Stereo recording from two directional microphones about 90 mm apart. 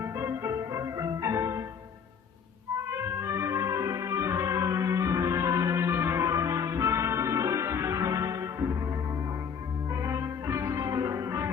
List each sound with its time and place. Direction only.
0.0 s music: 30° right (ahead or behind)
2.9 s music: 30° right (ahead or behind)
9.9 s music: 35° right (ahead or behind)